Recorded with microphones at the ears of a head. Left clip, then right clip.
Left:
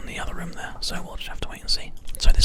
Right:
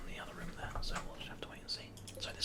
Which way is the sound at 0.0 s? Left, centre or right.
Left.